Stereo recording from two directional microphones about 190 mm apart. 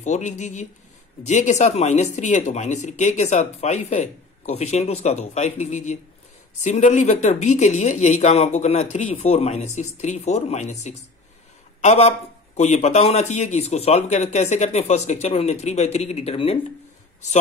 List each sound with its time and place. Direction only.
0.0 s a man's voice: 35° left (ahead or behind)